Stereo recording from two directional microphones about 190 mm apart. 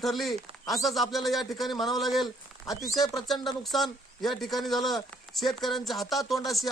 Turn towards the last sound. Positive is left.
turn(degrees=0)  # may be behind; listen again after turning